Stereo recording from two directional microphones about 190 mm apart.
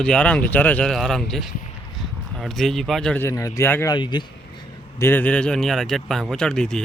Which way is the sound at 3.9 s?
25° left (ahead or behind).